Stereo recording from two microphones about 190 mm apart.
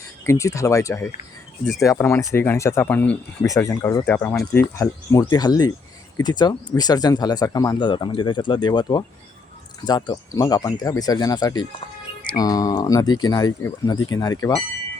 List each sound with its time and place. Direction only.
0.3 s speech: 15° left (ahead or behind)